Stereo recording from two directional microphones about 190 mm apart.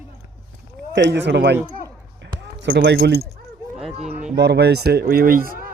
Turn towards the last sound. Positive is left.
turn(degrees=-50)  # may be behind; listen again after turning